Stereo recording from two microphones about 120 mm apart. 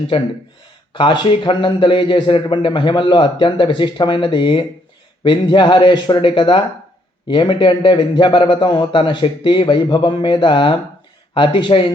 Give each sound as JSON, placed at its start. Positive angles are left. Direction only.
{"t": 0.1, "sound": "a man's voice", "side_deg": 45}